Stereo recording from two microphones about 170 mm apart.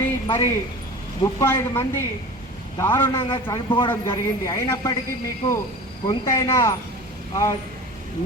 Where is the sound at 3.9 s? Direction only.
15° left (ahead or behind).